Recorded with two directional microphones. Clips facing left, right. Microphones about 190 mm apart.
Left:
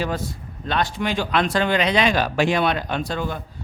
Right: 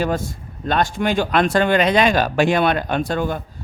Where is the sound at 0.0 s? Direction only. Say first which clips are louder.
Right 4 dB; 45° right (ahead or behind).